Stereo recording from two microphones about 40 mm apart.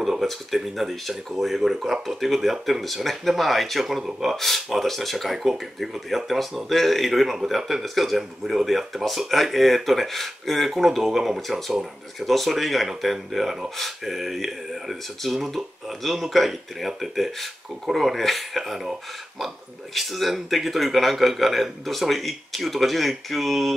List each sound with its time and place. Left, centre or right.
0.2 s speech: centre
3.8 s speech: centre
12.3 s speech: centre